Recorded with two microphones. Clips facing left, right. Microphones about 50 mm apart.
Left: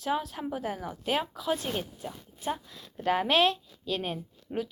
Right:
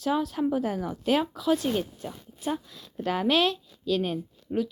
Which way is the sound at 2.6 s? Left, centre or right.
Left.